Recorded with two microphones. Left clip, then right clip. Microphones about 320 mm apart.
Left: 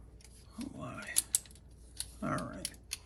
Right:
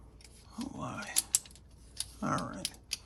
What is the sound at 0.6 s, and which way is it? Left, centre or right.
Speech, centre.